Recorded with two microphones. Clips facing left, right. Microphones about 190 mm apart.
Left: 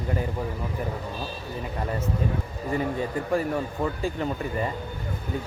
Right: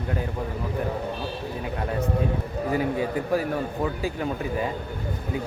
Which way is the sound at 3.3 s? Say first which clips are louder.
Right 1 dB; 5° right (ahead or behind).